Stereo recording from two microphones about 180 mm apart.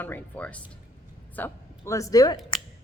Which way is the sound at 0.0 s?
10° left (ahead or behind).